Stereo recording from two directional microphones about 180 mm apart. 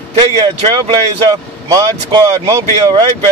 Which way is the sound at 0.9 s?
20° right (ahead or behind).